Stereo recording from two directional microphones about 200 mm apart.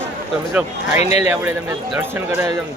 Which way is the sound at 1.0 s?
30° left (ahead or behind).